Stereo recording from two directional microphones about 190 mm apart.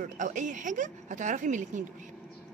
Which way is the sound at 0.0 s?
40° right (ahead or behind).